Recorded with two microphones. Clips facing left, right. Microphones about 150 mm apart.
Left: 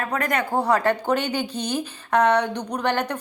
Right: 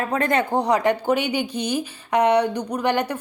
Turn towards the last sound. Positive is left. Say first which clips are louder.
# right 2 dB
turn(degrees=-10)  # may be behind; listen again after turning